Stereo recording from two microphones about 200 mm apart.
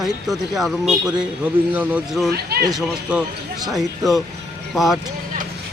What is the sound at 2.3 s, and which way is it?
Speech, 50° right (ahead or behind).